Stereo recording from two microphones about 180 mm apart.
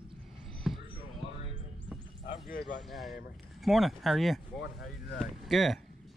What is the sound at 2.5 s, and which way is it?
Speech, 55° left (ahead or behind).